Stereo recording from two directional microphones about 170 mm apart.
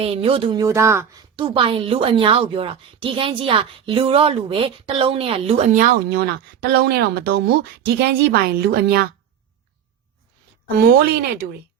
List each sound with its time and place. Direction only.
0.0 s a woman's voice: 35° right (ahead or behind)
0.6 s speech: 15° right (ahead or behind)
1.4 s a woman's voice: 30° right (ahead or behind); by 6.0 s 50° right (ahead or behind)
6.1 s a woman's voice: 65° right (ahead or behind)
10.8 s a woman's voice: 65° right (ahead or behind)